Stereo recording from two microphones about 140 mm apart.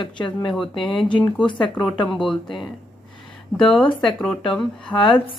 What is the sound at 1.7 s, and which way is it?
Speech, 10° left (ahead or behind).